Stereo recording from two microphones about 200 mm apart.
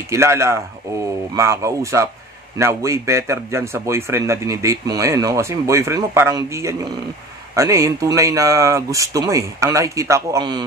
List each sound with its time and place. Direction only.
0.1 s speech: 15° right (ahead or behind)